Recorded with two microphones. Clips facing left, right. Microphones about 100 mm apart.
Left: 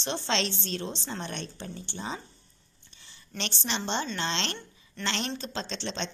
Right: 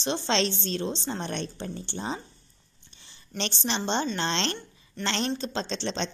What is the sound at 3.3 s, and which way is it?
A woman's voice, 30° right (ahead or behind).